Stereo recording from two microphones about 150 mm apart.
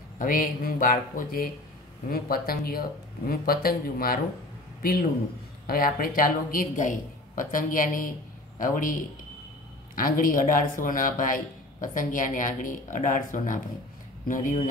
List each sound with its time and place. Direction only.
0.2 s speech: 70° left (ahead or behind)
5.7 s speech: 75° left (ahead or behind)